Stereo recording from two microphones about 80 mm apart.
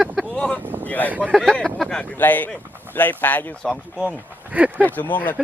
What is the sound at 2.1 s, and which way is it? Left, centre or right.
Speech, left.